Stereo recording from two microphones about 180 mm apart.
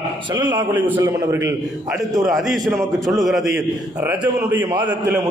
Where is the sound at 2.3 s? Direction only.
Centre (ahead or behind).